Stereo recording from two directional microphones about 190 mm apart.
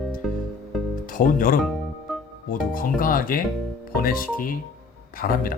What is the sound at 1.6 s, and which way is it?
Music, centre (ahead or behind).